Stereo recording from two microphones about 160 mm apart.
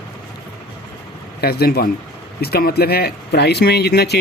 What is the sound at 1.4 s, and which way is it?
Speech, 75° left (ahead or behind).